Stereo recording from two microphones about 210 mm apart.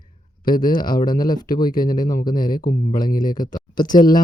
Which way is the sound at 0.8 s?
40° left (ahead or behind).